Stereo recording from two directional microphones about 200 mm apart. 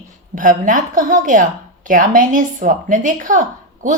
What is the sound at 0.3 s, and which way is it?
A woman's voice, 40° right (ahead or behind).